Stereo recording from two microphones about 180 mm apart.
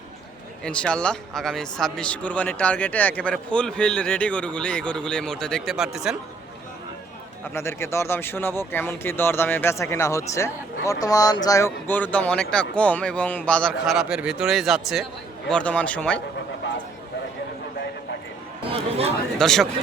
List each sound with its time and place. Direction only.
0.6 s speech: 5° left (ahead or behind)
7.5 s speech: 15° left (ahead or behind)
18.6 s speech: 35° right (ahead or behind)
19.4 s speech: centre (ahead or behind)